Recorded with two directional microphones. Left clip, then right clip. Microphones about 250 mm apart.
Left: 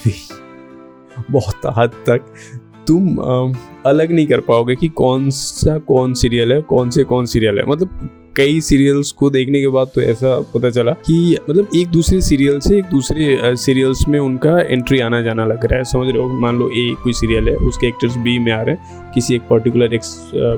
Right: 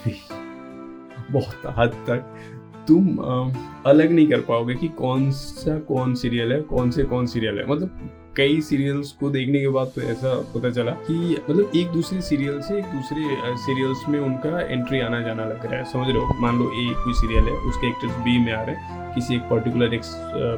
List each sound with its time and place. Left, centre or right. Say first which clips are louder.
1.4 s speech: left 7 dB; left